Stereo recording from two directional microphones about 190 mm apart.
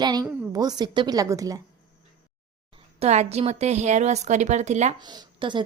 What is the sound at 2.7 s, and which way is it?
Speech, 35° right (ahead or behind).